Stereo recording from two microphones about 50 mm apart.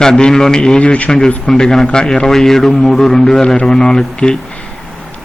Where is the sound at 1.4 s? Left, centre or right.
Centre.